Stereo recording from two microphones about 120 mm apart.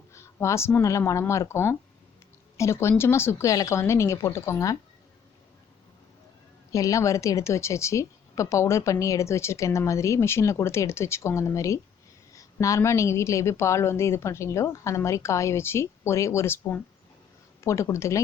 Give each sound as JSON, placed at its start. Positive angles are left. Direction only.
{"t": 0.1, "sound": "a woman's voice", "side_deg": 25}
{"t": 6.7, "sound": "a woman's voice", "side_deg": 30}